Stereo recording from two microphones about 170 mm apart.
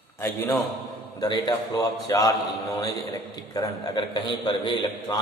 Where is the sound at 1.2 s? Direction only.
25° left (ahead or behind).